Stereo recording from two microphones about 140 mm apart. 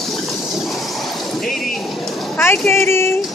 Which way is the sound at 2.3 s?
15° left (ahead or behind).